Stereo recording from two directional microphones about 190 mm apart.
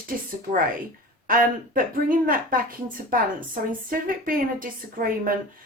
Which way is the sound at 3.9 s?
50° right (ahead or behind).